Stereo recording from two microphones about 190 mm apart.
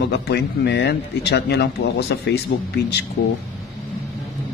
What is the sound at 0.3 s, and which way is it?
Speech, 60° left (ahead or behind).